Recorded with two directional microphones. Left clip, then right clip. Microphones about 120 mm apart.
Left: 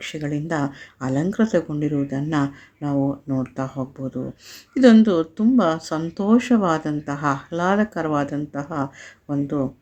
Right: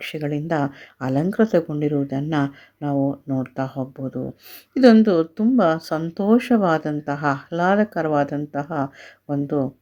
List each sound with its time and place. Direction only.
0.0 s speech: 30° right (ahead or behind)